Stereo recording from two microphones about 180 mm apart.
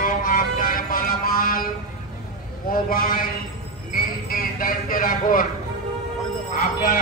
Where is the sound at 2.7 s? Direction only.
55° left (ahead or behind).